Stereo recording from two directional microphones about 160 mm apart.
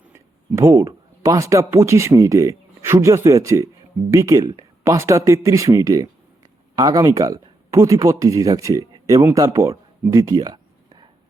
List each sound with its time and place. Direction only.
0.1 s speech: 20° right (ahead or behind)